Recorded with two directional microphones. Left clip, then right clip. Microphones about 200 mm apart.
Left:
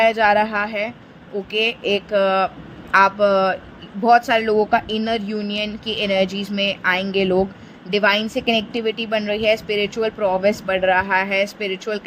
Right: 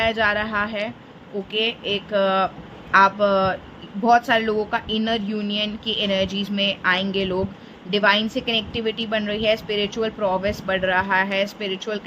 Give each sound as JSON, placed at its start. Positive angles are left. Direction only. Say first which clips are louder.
{"t": 0.0, "sound": "a woman's voice", "louder": "left 5 dB", "side_deg": 25}